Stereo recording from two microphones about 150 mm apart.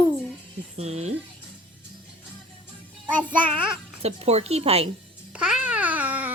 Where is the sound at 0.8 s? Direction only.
45° right (ahead or behind).